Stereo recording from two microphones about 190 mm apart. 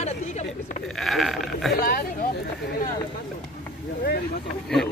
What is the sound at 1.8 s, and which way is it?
Speech, 55° left (ahead or behind).